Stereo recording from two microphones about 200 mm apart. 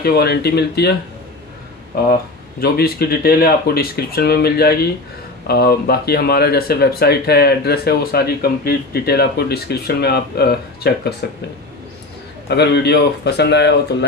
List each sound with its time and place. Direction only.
0.0 s speech: 50° left (ahead or behind)
2.6 s speech: 50° left (ahead or behind)
12.4 s speech: 55° left (ahead or behind)